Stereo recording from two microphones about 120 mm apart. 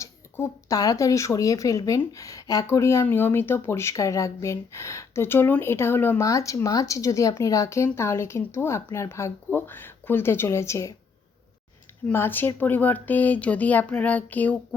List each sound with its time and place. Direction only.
0.0 s speech: 25° left (ahead or behind)
12.1 s speech: 15° left (ahead or behind)